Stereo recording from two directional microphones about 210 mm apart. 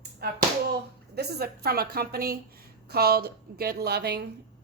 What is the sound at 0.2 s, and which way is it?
A woman's voice, 50° right (ahead or behind).